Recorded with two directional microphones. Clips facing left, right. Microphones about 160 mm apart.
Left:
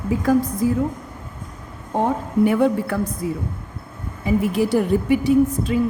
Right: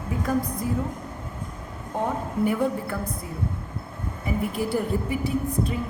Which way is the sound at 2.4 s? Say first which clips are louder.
Left 7 dB; 80° left.